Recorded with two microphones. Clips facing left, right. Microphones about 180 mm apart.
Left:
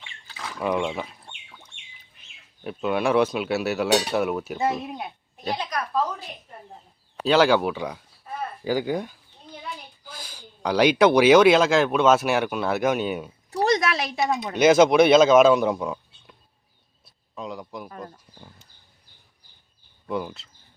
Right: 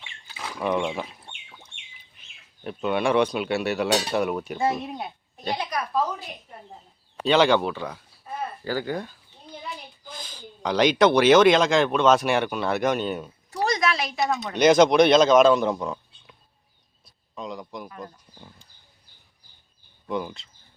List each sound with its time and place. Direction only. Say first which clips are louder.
0.3 s a sound: even; 10° right (ahead or behind)
0.6 s speech: even; centre (ahead or behind)
2.6 s speech: even; 5° left (ahead or behind)
5.5 s speech: even; 10° right (ahead or behind)
8.6 s speech: left 5 dB; 15° left (ahead or behind)
13.5 s a sound: left 2 dB; 35° left (ahead or behind)
14.2 s speech: left 1 dB; 15° left (ahead or behind)
17.3 s speech: even; 5° left (ahead or behind)
20.1 s speech: even; 5° left (ahead or behind)